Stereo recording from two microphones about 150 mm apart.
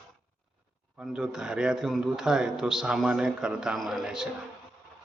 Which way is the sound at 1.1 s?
5° right (ahead or behind).